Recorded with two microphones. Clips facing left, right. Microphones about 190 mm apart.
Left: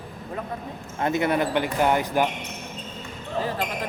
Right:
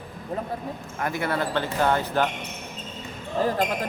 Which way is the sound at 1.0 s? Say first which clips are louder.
Left 4 dB; 20° left (ahead or behind).